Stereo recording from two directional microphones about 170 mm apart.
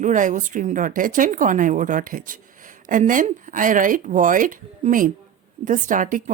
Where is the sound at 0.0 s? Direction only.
50° right (ahead or behind).